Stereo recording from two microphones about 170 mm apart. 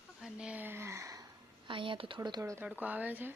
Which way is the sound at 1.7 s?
30° right (ahead or behind).